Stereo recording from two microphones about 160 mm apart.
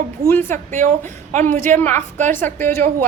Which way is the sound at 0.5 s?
50° right (ahead or behind).